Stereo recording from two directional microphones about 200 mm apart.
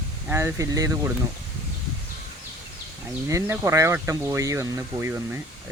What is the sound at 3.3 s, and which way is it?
Speech, 15° right (ahead or behind).